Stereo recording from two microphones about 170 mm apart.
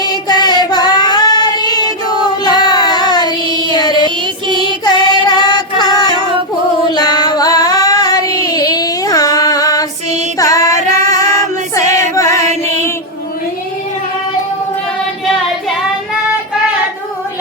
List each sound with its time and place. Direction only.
0.0 s child singing: 25° left (ahead or behind)
4.5 s music: 25° left (ahead or behind)
6.9 s female singing: 25° left (ahead or behind)
10.3 s music: 20° left (ahead or behind)
11.9 s music: 45° right (ahead or behind)
12.1 s mantra: 20° left (ahead or behind)